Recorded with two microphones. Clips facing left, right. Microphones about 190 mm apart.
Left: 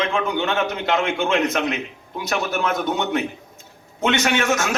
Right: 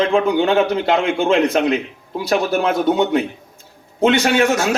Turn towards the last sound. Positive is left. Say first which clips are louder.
# right 5 dB
turn(degrees=-30)  # may be behind; listen again after turning